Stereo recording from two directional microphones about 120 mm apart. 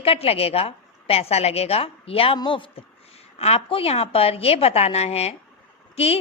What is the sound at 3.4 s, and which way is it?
A woman's voice, 55° left (ahead or behind).